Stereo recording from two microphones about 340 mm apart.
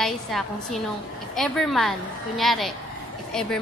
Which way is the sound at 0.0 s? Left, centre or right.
Centre.